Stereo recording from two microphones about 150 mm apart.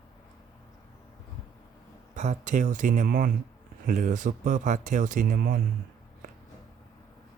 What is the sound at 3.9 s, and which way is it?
Speech, 55° right (ahead or behind).